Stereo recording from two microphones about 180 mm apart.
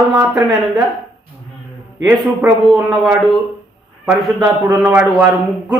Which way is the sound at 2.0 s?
5° right (ahead or behind).